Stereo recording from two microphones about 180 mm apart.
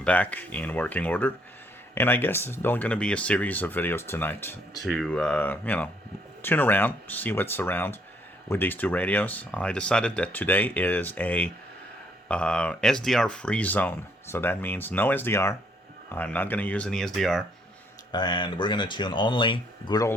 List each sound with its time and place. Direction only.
0.0 s speech: 10° left (ahead or behind)
4.8 s speech: centre (ahead or behind)
18.1 s speech: 25° left (ahead or behind)